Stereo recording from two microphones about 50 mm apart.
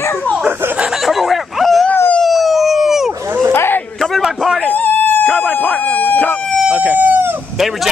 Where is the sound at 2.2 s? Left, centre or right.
Centre.